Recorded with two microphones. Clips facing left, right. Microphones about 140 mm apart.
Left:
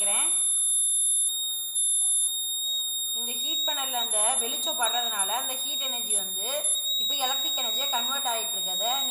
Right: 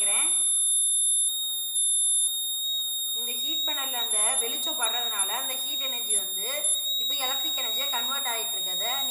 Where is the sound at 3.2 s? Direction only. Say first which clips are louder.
Left 2 dB; 20° left (ahead or behind).